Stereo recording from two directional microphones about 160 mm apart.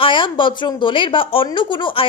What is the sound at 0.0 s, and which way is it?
Speech, 30° left (ahead or behind).